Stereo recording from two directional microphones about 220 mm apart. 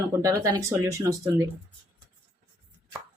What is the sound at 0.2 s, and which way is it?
Speech, 15° right (ahead or behind).